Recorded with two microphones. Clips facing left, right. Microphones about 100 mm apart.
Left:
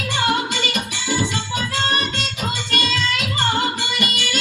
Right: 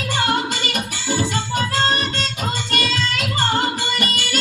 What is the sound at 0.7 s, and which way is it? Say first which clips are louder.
Music: even; 45° right (ahead or behind).